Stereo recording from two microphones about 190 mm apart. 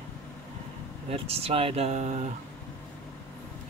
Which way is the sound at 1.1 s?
30° right (ahead or behind).